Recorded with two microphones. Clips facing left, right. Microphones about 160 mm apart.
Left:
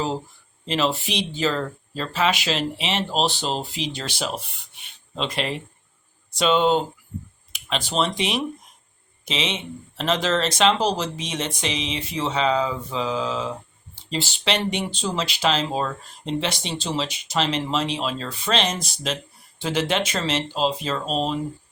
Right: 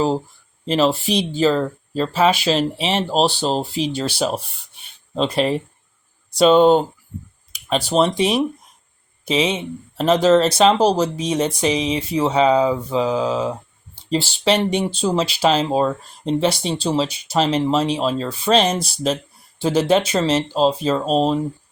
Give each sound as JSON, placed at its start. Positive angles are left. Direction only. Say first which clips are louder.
{"t": 0.6, "sound": "speech", "louder": "right 6 dB", "side_deg": -40}
{"t": 10.0, "sound": "speech", "louder": "right 8 dB", "side_deg": -40}
{"t": 14.7, "sound": "speech", "louder": "right 7 dB", "side_deg": -35}